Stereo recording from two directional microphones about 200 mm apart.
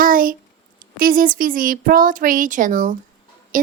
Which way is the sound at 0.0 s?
45° right (ahead or behind).